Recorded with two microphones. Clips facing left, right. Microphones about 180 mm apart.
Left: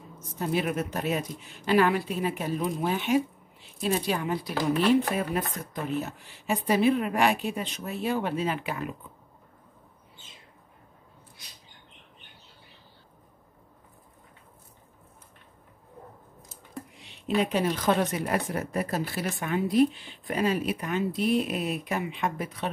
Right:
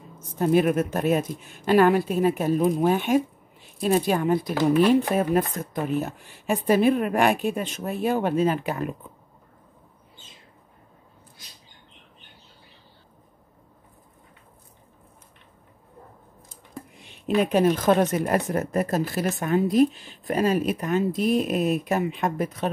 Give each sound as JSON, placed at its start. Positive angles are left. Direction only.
{"t": 0.4, "sound": "speech", "side_deg": -50}
{"t": 16.9, "sound": "speech", "side_deg": -50}